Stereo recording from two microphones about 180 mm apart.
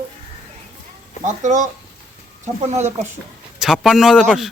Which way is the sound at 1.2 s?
40° right (ahead or behind).